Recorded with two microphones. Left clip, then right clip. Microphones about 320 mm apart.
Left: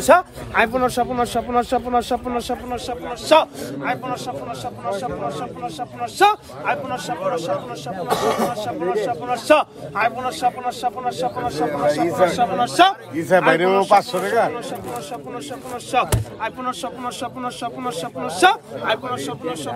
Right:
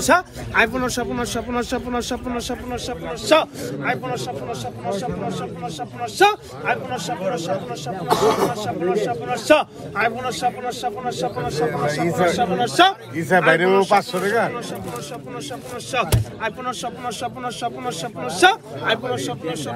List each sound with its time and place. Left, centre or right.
0.0 s a man's voice: left
8.5 s a man's voice: centre
15.9 s a man's voice: left